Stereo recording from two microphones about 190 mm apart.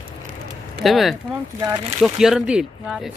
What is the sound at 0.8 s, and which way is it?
Speech, centre (ahead or behind).